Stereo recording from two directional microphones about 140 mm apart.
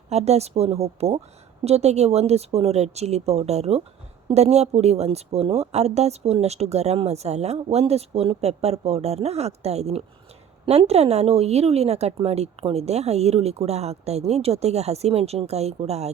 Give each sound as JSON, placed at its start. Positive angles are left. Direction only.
{"t": 0.1, "sound": "speech", "side_deg": -50}